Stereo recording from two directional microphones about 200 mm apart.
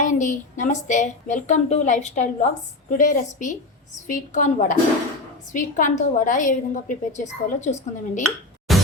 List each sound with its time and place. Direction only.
0.0 s a woman's voice: 40° left (ahead or behind)
8.7 s music: centre (ahead or behind)